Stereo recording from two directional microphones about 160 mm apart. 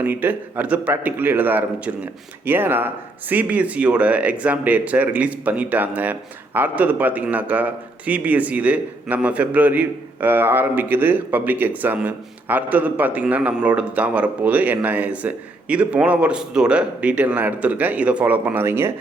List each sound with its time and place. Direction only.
0.0 s speech: 10° right (ahead or behind)